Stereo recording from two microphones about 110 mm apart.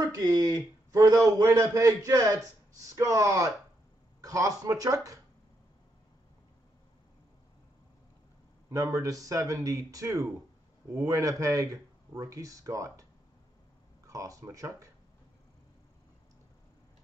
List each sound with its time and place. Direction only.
0.0 s a man's voice: 35° right (ahead or behind)
8.6 s a man's voice: 30° right (ahead or behind)
14.0 s a man's voice: 30° right (ahead or behind)